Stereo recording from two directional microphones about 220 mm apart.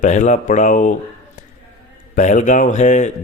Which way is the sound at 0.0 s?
35° left (ahead or behind).